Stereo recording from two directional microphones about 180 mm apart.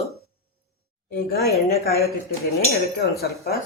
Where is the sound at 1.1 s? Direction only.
60° left (ahead or behind).